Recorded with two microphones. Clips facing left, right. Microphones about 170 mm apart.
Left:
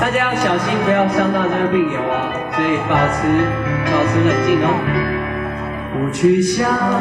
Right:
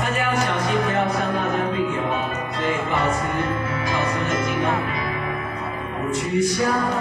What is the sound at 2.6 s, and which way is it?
Music, 65° left (ahead or behind).